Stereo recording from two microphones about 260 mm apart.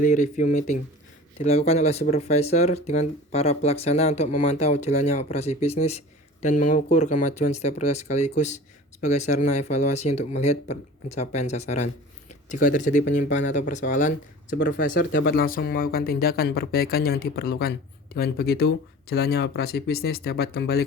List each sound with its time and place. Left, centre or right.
0.0 s speech: left
14.7 s speech: left